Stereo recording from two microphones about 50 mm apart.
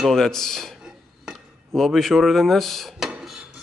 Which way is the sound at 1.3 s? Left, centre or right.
Centre.